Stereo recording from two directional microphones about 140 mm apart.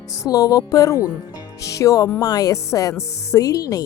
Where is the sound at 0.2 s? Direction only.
25° left (ahead or behind).